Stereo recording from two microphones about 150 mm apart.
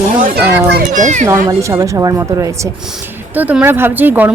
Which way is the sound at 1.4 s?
20° right (ahead or behind).